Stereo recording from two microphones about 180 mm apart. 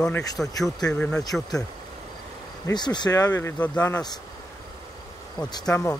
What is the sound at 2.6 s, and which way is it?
Speech, 25° left (ahead or behind).